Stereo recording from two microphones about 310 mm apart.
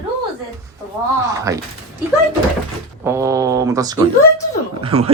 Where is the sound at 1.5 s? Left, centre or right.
Centre.